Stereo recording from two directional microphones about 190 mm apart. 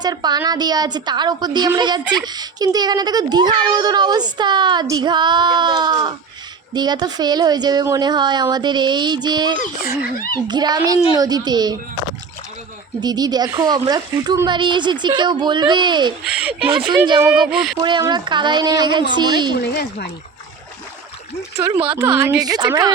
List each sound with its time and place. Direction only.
0.0 s a child's voice: 20° right (ahead or behind)
13.0 s a child's voice: 20° right (ahead or behind)
16.2 s speech: 5° right (ahead or behind)
16.9 s a child's voice: 20° right (ahead or behind)
17.4 s speech: centre (ahead or behind)
17.7 s a child's voice: 25° right (ahead or behind)
19.5 s speech: 55° left (ahead or behind)
21.6 s a child's voice: 20° right (ahead or behind)